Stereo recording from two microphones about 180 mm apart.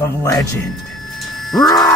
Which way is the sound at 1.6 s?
20° left (ahead or behind).